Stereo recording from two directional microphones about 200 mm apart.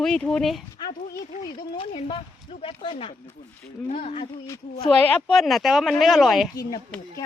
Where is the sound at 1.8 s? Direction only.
25° left (ahead or behind).